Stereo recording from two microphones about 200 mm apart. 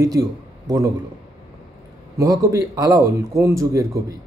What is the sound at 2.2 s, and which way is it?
Speech, 15° right (ahead or behind).